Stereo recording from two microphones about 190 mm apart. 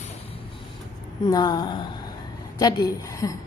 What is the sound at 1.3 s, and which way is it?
A woman's voice, 20° left (ahead or behind).